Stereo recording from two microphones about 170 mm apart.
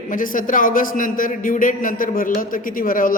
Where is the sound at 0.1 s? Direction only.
50° left (ahead or behind).